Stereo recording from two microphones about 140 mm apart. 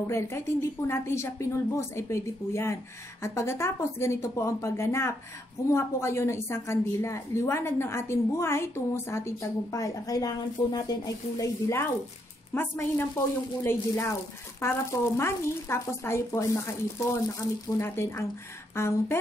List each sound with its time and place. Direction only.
0.0 s a woman's voice: 20° left (ahead or behind)